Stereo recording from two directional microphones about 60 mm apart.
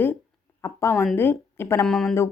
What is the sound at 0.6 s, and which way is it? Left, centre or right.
A woman's voice, left.